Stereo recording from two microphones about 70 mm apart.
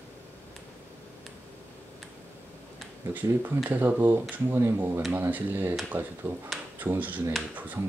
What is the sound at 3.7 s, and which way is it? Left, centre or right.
Speech, right.